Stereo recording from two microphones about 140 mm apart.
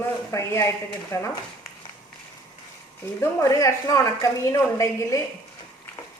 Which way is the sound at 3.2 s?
25° left (ahead or behind).